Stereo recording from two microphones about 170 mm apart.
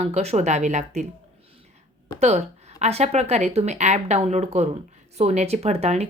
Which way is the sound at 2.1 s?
40° right (ahead or behind).